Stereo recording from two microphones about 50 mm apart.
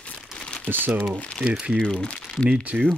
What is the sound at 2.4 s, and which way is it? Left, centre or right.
Speech, right.